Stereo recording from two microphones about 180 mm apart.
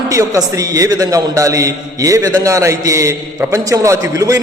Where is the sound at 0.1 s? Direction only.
15° right (ahead or behind).